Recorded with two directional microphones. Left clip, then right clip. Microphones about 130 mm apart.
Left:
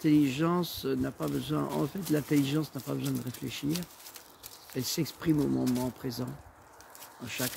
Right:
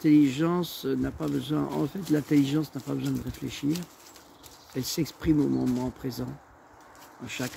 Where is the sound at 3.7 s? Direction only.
70° left (ahead or behind).